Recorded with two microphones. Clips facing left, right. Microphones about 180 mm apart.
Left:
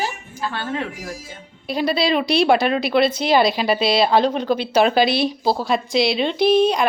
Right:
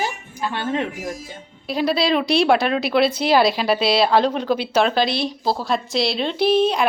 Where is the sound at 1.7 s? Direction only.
Centre (ahead or behind).